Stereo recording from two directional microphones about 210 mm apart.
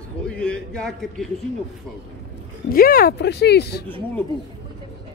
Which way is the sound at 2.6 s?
45° left (ahead or behind).